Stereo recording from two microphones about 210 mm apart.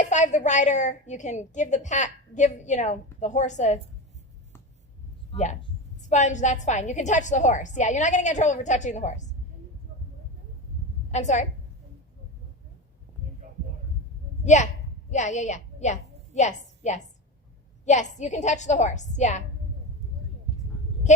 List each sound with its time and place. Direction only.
0.1 s a woman's voice: 35° left (ahead or behind)
5.3 s a woman's voice: 35° left (ahead or behind)
11.1 s a woman's voice: 35° left (ahead or behind)
14.4 s a woman's voice: 35° left (ahead or behind)